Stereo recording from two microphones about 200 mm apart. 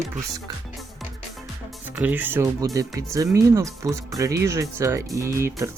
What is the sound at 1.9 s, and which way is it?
Speech, 10° right (ahead or behind).